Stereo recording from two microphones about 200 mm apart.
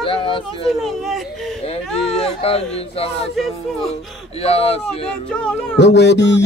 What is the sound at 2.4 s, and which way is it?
Speech, 30° left (ahead or behind).